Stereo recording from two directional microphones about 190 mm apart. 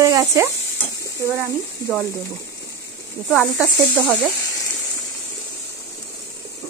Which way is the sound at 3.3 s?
Centre (ahead or behind).